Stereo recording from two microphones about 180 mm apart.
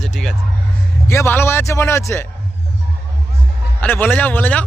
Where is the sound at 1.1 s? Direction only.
15° left (ahead or behind).